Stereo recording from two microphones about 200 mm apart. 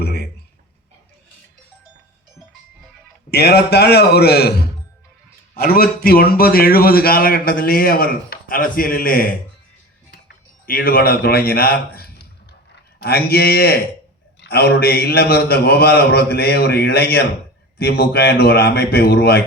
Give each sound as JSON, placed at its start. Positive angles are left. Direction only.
{"t": 0.0, "sound": "a sound", "side_deg": 55}
{"t": 3.2, "sound": "a man's voice", "side_deg": 55}
{"t": 10.7, "sound": "a man's voice", "side_deg": 45}